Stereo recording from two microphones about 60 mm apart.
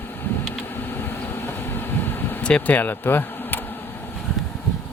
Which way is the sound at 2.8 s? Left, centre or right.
Left.